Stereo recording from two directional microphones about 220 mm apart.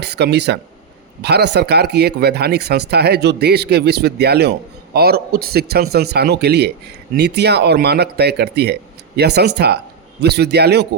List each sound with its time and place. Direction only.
0.0 s a man's voice: 50° right (ahead or behind)